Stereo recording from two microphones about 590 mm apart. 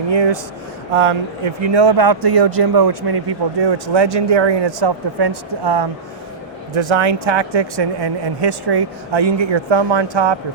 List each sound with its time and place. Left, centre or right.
0.1 s speech: right